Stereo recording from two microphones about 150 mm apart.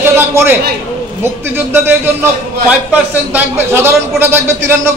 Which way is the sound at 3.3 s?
15° right (ahead or behind).